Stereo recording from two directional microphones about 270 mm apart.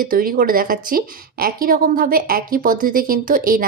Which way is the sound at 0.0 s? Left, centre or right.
Right.